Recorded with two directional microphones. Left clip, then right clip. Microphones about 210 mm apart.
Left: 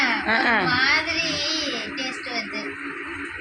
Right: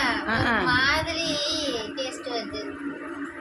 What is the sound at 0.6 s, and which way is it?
Music, 20° right (ahead or behind).